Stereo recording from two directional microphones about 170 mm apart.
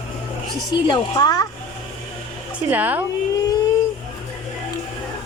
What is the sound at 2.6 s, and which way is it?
Speech, 10° right (ahead or behind).